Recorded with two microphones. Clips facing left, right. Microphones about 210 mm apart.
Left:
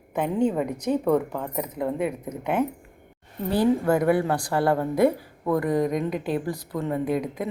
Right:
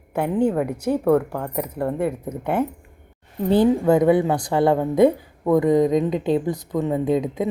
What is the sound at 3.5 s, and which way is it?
A woman's voice, 20° right (ahead or behind).